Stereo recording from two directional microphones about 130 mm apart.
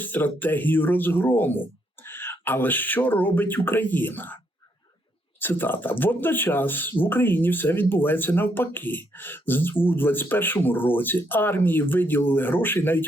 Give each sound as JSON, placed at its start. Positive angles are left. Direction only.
{"t": 0.0, "sound": "speech", "side_deg": 15}
{"t": 5.4, "sound": "speech", "side_deg": 15}